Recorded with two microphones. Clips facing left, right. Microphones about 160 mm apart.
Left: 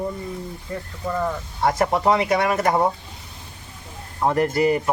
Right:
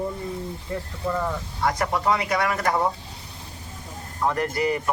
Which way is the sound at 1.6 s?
30° left (ahead or behind).